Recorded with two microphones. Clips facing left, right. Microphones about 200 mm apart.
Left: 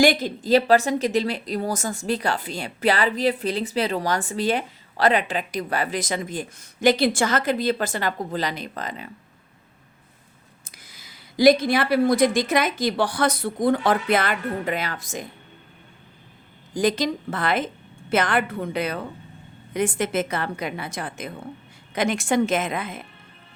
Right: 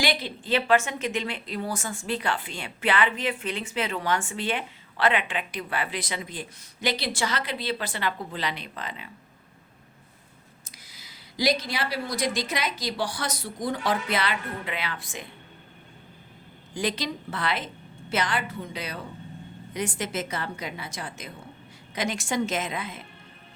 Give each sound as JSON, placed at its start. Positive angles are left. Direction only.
{"t": 0.0, "sound": "a woman's voice", "side_deg": 45}
{"t": 10.6, "sound": "a woman's voice", "side_deg": 50}
{"t": 16.7, "sound": "a woman's voice", "side_deg": 45}